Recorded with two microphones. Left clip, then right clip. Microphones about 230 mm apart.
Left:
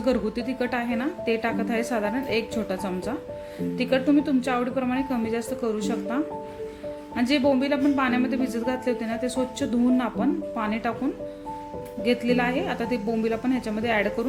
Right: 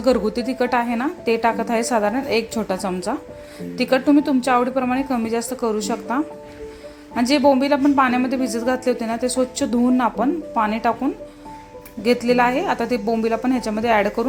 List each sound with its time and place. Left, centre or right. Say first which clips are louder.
0.0 s a woman's voice: right 7 dB; centre
12.0 s a woman's voice: right 7 dB; centre